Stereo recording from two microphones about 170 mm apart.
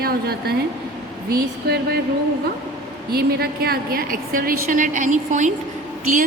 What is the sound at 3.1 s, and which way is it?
A woman's voice, 65° right (ahead or behind).